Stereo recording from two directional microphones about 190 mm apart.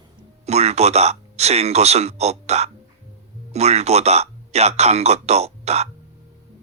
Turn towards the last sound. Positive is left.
turn(degrees=-35)  # may be behind; listen again after turning